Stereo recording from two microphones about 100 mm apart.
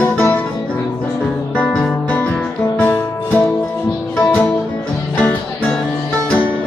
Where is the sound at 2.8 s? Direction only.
20° left (ahead or behind).